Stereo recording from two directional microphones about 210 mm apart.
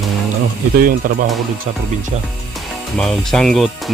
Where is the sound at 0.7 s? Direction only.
40° right (ahead or behind).